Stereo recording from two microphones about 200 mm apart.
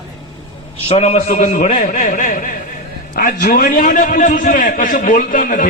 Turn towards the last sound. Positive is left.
turn(degrees=45)  # may be behind; listen again after turning